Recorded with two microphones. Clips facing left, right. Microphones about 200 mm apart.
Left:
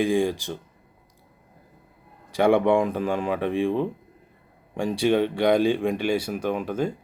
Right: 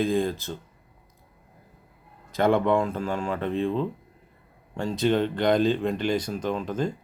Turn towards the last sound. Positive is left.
turn(degrees=10)  # may be behind; listen again after turning